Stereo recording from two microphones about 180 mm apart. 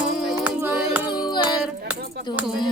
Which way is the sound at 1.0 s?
25° left (ahead or behind).